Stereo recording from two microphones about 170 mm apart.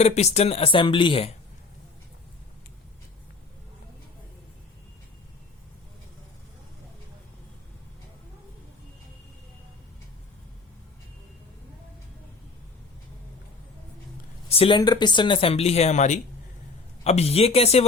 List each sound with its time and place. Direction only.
0.0 s speech: 40° left (ahead or behind)
14.5 s speech: 35° left (ahead or behind)